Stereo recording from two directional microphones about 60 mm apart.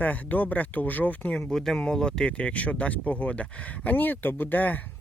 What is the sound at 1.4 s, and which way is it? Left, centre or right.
Speech, centre.